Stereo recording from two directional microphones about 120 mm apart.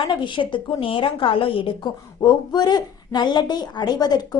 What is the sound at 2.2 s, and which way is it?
A woman's voice, 35° left (ahead or behind).